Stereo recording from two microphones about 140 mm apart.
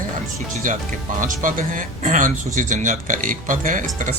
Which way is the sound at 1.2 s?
70° right (ahead or behind).